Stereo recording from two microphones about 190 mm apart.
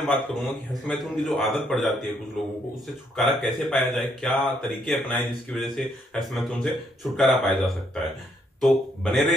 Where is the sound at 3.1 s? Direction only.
Centre (ahead or behind).